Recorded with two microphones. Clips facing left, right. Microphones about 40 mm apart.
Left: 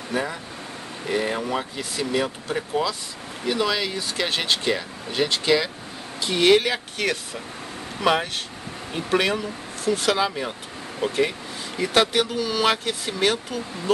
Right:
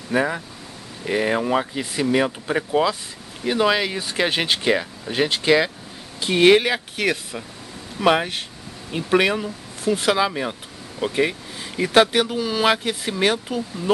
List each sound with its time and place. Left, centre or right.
0.1 s speech: right